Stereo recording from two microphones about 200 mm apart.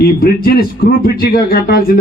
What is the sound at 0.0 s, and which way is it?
A man's voice, 50° left (ahead or behind).